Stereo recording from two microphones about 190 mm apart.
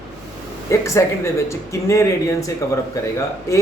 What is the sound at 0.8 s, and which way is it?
Speech, 15° left (ahead or behind).